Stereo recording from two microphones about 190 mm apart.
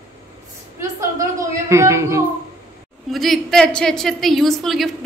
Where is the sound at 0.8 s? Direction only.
15° right (ahead or behind).